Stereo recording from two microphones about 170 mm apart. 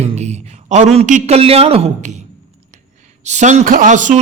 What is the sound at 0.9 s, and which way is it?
A man's voice, 40° right (ahead or behind).